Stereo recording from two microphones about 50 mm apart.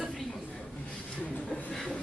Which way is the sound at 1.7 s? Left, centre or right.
Centre.